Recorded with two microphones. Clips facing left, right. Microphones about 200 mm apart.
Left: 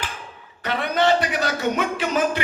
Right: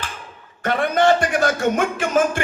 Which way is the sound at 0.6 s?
50° right (ahead or behind).